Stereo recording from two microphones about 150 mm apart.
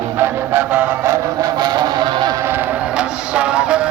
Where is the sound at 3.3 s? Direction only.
5° right (ahead or behind).